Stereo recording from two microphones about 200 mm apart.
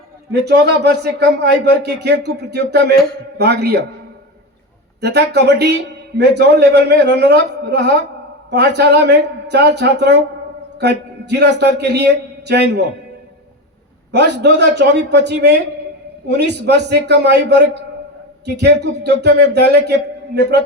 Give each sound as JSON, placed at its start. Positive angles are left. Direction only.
{"t": 0.3, "sound": "speech", "side_deg": -55}
{"t": 4.9, "sound": "a man's voice", "side_deg": -55}
{"t": 14.1, "sound": "speech", "side_deg": -60}